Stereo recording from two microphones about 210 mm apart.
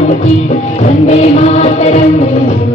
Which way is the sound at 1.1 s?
35° left (ahead or behind).